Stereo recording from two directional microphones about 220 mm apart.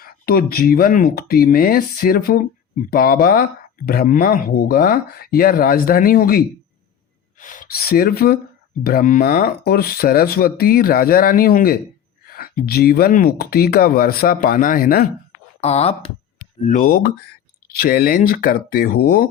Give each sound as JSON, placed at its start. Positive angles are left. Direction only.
{"t": 0.0, "sound": "speech", "side_deg": 45}
{"t": 15.6, "sound": "speech", "side_deg": 30}